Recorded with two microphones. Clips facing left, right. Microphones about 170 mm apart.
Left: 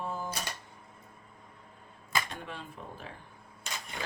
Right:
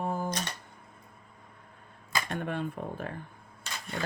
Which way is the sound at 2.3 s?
55° right (ahead or behind).